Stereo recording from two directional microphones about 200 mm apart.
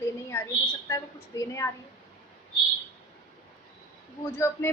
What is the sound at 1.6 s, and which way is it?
Speech, 15° left (ahead or behind).